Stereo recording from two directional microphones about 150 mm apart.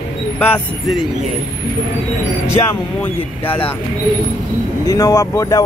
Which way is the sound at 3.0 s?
10° left (ahead or behind).